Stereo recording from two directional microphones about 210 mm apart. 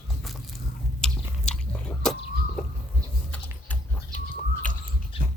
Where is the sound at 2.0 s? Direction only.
5° left (ahead or behind).